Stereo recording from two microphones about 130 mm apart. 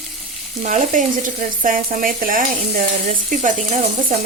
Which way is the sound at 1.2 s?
90° right.